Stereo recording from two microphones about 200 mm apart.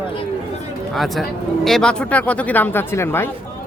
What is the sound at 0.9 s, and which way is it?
Speech, centre (ahead or behind).